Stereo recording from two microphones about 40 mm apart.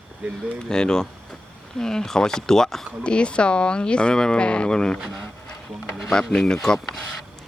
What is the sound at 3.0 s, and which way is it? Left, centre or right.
Speech, left.